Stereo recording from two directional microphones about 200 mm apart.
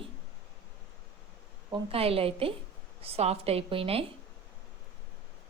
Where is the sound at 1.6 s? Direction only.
25° right (ahead or behind).